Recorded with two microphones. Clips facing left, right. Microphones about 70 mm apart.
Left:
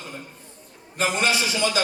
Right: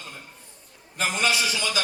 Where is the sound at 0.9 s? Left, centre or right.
Left.